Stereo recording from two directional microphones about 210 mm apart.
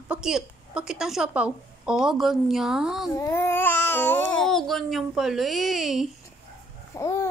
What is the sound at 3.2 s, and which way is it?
A woman's voice, 10° left (ahead or behind).